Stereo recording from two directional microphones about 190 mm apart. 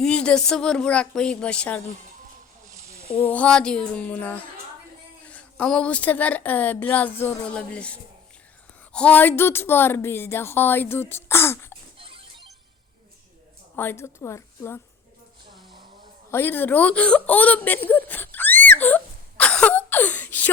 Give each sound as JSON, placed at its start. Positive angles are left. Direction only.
{"t": 0.0, "sound": "speech", "side_deg": 5}
{"t": 3.2, "sound": "speech", "side_deg": 5}
{"t": 11.1, "sound": "throat clearing", "side_deg": 15}
{"t": 11.9, "sound": "music", "side_deg": -30}
{"t": 13.7, "sound": "speech", "side_deg": 15}
{"t": 16.3, "sound": "speech", "side_deg": 10}